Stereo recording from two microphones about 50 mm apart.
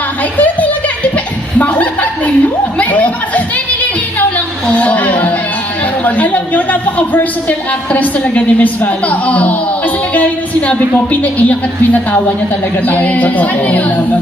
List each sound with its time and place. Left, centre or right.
1.1 s chuckle: left
4.8 s a sound: left
6.1 s a woman's voice: left
12.8 s a woman's voice: left